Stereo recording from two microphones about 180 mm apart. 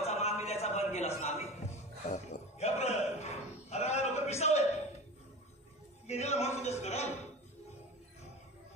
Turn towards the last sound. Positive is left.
turn(degrees=40)  # may be behind; listen again after turning